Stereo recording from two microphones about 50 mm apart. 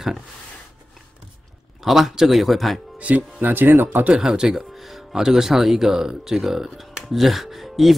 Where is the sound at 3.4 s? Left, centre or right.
Right.